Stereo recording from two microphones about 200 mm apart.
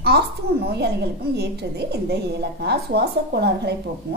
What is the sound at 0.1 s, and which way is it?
Speech, 55° right (ahead or behind).